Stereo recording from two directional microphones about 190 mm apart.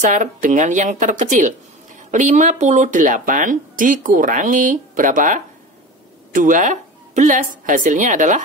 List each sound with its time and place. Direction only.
0.0 s speech: 40° right (ahead or behind)